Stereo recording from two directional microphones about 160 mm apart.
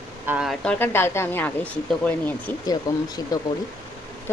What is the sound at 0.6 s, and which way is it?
Speech, 10° left (ahead or behind).